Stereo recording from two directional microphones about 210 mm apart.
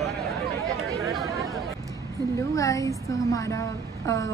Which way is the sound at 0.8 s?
15° right (ahead or behind).